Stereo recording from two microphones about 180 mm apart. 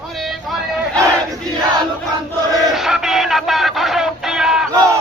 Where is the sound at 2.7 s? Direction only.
5° right (ahead or behind).